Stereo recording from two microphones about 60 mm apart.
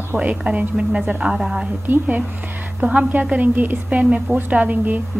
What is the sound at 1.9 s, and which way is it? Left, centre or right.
A woman's voice, right.